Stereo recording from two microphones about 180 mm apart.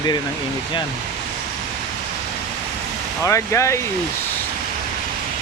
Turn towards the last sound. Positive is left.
turn(degrees=15)  # may be behind; listen again after turning